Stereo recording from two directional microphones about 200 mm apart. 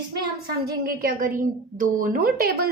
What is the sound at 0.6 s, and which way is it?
A woman's voice, 45° right (ahead or behind).